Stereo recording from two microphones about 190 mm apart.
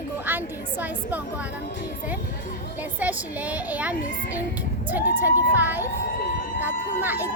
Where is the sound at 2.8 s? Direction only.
10° right (ahead or behind).